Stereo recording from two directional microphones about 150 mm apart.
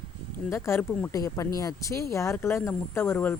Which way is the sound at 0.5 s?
15° left (ahead or behind).